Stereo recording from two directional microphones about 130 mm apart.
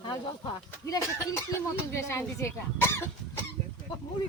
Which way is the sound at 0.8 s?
25° left (ahead or behind).